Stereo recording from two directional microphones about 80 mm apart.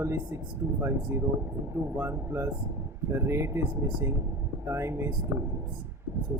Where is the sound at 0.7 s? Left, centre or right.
Right.